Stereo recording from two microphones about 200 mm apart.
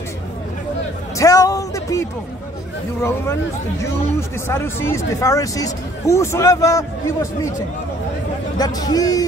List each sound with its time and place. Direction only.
1.1 s a sound: 15° left (ahead or behind)
3.0 s speech: 10° left (ahead or behind)
4.5 s speech: 10° left (ahead or behind)
8.5 s speech: 20° left (ahead or behind)